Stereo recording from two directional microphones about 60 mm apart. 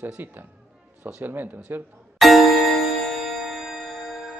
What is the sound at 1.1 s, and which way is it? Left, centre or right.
Speech, right.